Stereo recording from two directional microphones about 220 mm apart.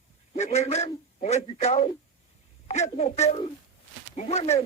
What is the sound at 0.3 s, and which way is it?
Speech, 30° left (ahead or behind).